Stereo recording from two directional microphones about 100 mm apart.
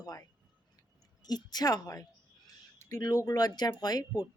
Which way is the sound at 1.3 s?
40° left (ahead or behind).